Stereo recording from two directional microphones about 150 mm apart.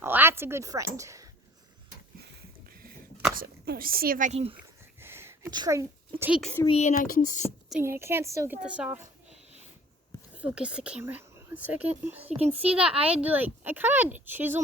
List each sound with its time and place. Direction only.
0.0 s a woman's voice: 15° right (ahead or behind)
2.7 s a sound: 75° right (ahead or behind)
3.3 s speech: 75° right (ahead or behind)
4.3 s speech: 40° right (ahead or behind)
4.6 s a sound: 15° right (ahead or behind)
5.5 s speech: 25° right (ahead or behind)
6.7 s speech: 50° left (ahead or behind); by 7.4 s 65° left (ahead or behind)
7.7 s speech: 15° right (ahead or behind)
8.6 s speech: 10° right (ahead or behind)
10.3 s speech: 10° right (ahead or behind)
12.7 s speech: 40° right (ahead or behind)
13.1 s speech: 10° right (ahead or behind)